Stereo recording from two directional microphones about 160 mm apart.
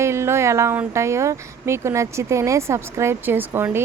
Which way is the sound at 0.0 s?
15° right (ahead or behind).